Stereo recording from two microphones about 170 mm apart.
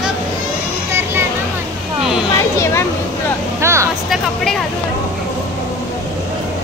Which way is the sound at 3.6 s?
15° right (ahead or behind).